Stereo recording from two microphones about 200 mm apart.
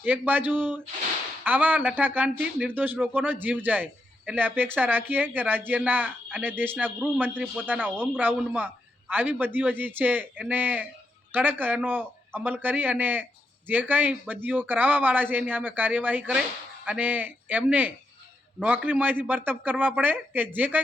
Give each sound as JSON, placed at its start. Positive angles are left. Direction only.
{"t": 0.0, "sound": "a man's voice", "side_deg": -10}